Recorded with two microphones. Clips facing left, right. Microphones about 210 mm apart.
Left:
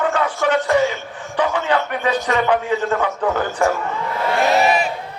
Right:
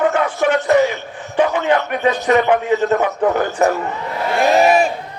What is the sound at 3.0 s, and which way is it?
Speech, 15° right (ahead or behind).